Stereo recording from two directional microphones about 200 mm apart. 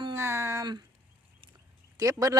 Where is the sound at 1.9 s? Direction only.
15° right (ahead or behind).